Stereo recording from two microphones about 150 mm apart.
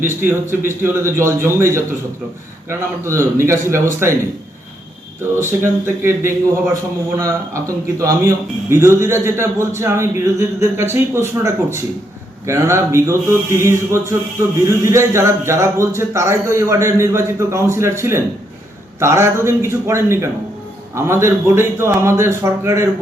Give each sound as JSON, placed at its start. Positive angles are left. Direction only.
{"t": 0.0, "sound": "a man's voice", "side_deg": -15}
{"t": 5.4, "sound": "a man's voice", "side_deg": -15}